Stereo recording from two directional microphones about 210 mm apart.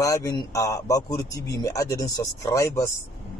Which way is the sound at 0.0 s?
15° left (ahead or behind).